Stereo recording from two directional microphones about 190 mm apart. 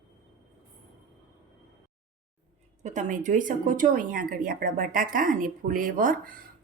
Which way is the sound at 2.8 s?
40° right (ahead or behind).